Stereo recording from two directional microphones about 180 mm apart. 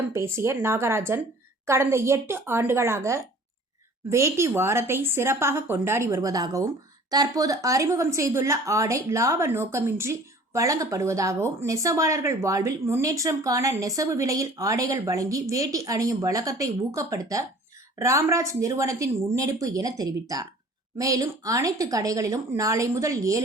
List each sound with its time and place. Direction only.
0.1 s speech: 15° right (ahead or behind)